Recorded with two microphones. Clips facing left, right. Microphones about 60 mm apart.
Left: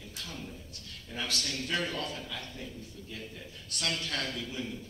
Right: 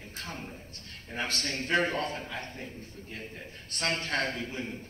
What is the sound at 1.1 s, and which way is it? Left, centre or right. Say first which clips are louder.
A man's voice: right 3 dB; right.